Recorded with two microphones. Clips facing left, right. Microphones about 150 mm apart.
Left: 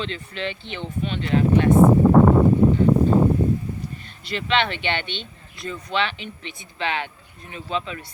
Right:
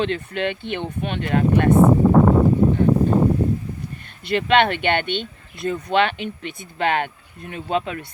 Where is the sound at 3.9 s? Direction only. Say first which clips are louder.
Right 7 dB; 55° right (ahead or behind).